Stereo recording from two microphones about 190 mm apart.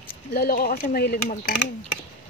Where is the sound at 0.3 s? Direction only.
50° left (ahead or behind).